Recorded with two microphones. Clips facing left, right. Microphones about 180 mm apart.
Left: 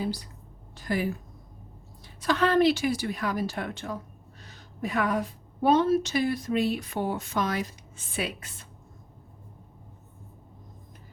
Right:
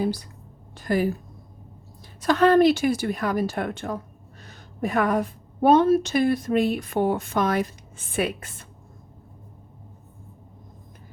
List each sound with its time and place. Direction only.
0.8 s a woman's voice: 45° right (ahead or behind)
2.2 s a woman's voice: 45° right (ahead or behind)